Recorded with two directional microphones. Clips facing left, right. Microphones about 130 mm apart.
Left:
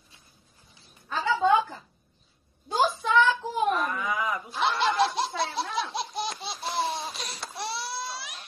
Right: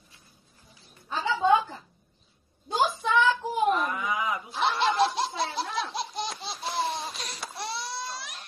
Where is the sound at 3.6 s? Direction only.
20° right (ahead or behind).